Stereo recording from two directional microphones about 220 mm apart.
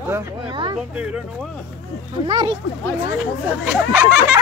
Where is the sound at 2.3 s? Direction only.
20° right (ahead or behind).